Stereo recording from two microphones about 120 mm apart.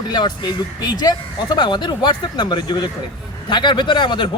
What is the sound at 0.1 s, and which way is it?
Speech, 35° left (ahead or behind).